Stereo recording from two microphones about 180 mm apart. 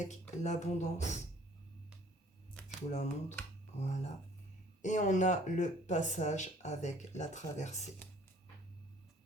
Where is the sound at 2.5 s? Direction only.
Centre (ahead or behind).